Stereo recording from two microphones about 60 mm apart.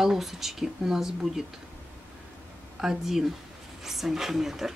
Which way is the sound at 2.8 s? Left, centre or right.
Centre.